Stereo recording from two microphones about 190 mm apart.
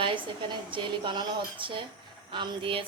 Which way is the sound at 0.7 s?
25° right (ahead or behind).